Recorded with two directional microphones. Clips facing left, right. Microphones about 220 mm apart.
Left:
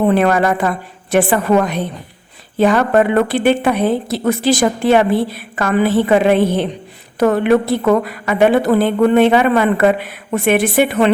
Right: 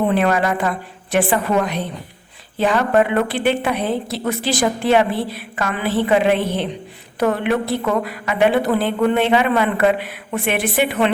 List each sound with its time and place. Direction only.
0.1 s a woman's voice: 45° left (ahead or behind)